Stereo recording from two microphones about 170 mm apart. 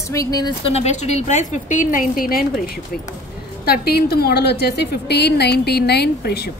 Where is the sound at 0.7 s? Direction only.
40° left (ahead or behind); by 6.5 s 70° left (ahead or behind).